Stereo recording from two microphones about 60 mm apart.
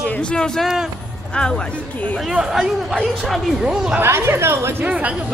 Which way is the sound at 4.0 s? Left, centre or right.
Right.